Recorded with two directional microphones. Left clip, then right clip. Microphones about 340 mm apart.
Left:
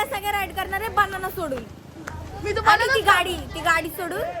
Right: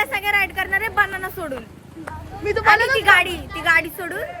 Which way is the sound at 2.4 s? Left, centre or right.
Right.